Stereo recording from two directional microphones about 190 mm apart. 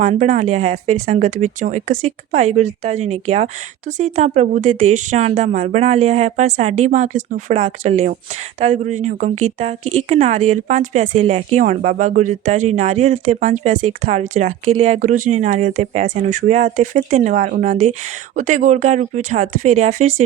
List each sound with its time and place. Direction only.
0.0 s a woman's voice: 35° right (ahead or behind)